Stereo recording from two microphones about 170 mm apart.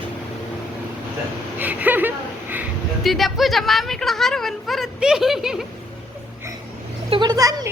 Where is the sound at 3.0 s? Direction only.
Centre (ahead or behind).